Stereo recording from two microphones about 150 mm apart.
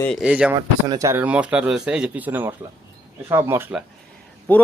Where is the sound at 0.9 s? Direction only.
20° right (ahead or behind).